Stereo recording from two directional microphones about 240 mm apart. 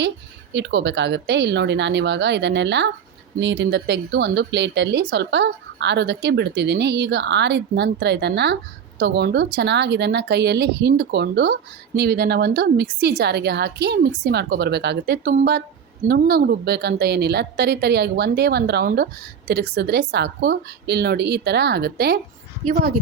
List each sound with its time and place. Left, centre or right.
0.5 s speech: right